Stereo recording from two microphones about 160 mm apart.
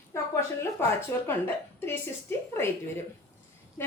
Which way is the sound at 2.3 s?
15° left (ahead or behind).